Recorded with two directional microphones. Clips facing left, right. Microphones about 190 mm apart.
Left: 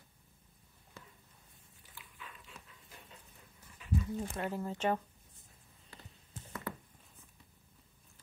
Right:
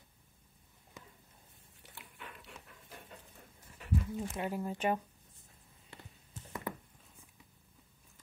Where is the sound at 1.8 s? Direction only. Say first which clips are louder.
Right 3 dB; 75° right (ahead or behind).